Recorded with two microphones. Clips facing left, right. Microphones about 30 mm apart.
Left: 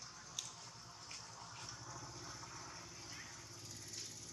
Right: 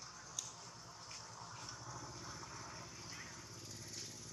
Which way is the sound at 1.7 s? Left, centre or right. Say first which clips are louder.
Right 1 dB; centre.